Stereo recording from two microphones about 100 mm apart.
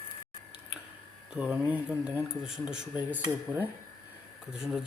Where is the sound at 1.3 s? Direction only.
15° right (ahead or behind).